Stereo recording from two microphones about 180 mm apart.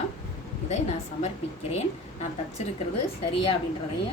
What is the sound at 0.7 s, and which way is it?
Speech, 40° left (ahead or behind).